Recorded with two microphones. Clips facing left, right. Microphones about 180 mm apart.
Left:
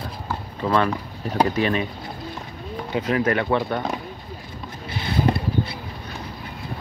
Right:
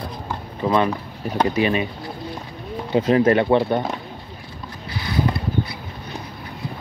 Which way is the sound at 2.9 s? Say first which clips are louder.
Right 6 dB; 30° right (ahead or behind).